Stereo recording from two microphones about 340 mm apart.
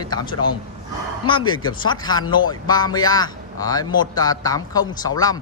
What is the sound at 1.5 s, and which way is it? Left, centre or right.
Speech, centre.